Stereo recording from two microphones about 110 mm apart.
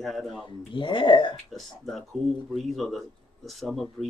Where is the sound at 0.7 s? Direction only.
45° left (ahead or behind).